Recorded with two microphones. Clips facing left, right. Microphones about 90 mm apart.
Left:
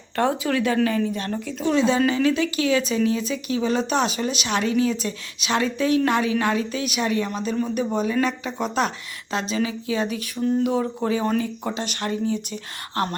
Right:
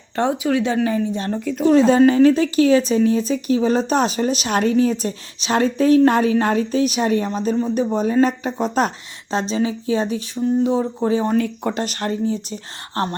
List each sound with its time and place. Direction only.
0.2 s speech: 20° right (ahead or behind)
1.4 s speech: 45° right (ahead or behind); by 11.3 s 25° right (ahead or behind)
11.3 s speech: 60° right (ahead or behind); by 13.1 s 30° right (ahead or behind)